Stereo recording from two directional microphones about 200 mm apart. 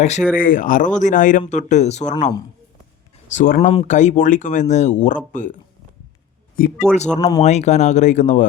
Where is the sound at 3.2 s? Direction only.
40° left (ahead or behind).